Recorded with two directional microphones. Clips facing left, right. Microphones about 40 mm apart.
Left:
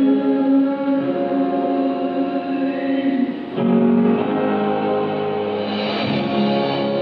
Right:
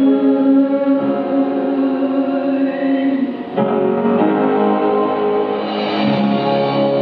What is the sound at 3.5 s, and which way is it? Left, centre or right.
Music, centre.